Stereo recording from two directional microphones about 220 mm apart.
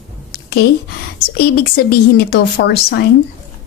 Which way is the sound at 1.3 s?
45° left (ahead or behind).